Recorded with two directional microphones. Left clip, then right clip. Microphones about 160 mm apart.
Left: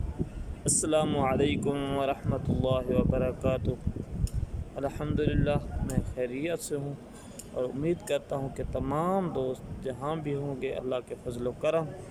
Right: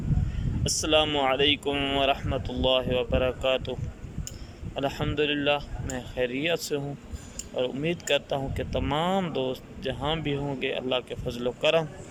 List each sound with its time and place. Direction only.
0.6 s speech: 20° left (ahead or behind)